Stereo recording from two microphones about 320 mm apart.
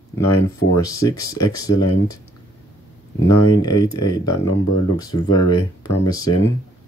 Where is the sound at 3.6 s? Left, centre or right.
Centre.